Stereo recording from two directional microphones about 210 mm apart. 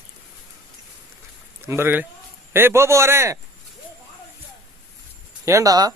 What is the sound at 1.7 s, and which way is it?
A man's voice, 10° right (ahead or behind).